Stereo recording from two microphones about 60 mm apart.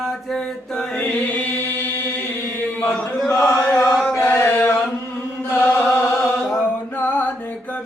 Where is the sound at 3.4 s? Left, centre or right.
Left.